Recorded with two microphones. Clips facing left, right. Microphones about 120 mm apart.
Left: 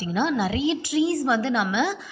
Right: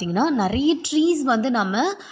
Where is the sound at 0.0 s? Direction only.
35° right (ahead or behind).